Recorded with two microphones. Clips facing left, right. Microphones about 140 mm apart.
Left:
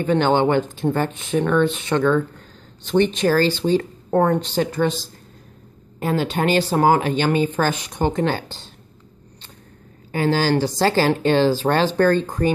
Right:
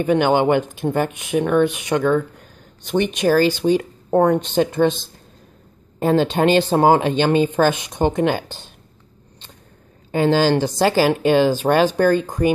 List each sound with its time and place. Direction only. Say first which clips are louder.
0.0 s speech: right 1 dB; 15° right (ahead or behind)
10.1 s speech: right 3 dB; 20° right (ahead or behind)